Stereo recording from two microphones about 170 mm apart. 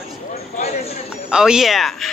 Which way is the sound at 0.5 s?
40° left (ahead or behind).